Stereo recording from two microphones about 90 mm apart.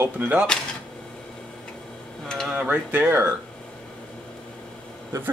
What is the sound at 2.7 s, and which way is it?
Speech, 20° right (ahead or behind).